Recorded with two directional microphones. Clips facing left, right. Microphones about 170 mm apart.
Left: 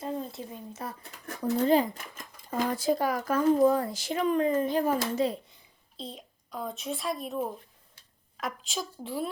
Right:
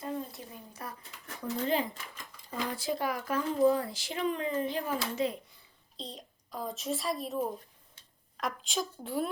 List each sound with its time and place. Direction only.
0.0 s a sound: 25° left (ahead or behind)
1.0 s speech: 45° left (ahead or behind)
6.0 s speech: centre (ahead or behind)